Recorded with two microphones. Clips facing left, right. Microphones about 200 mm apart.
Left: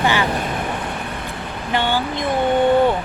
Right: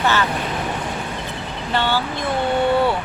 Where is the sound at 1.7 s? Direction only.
15° left (ahead or behind).